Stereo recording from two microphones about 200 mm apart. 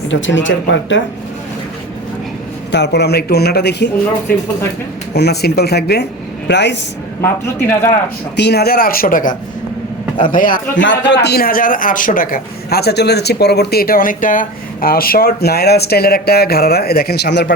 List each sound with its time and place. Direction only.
0.1 s speech: 65° left (ahead or behind)
2.7 s a man's voice: 60° left (ahead or behind)
5.1 s a man's voice: 55° left (ahead or behind)
7.2 s speech: 10° left (ahead or behind)
8.4 s a man's voice: 55° left (ahead or behind)
11.1 s a man's voice: 55° left (ahead or behind)